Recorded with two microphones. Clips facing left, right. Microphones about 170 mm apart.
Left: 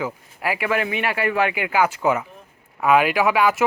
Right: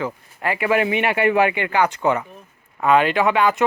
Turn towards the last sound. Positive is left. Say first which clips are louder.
# right 1 dB
turn(degrees=5)  # may be behind; listen again after turning